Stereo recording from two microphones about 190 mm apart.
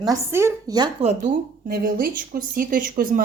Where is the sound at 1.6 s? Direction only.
50° right (ahead or behind).